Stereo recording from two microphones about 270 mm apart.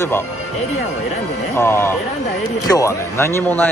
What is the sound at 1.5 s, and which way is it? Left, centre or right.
A man's voice, centre.